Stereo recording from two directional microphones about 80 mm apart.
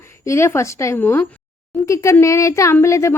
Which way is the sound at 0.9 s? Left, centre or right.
Left.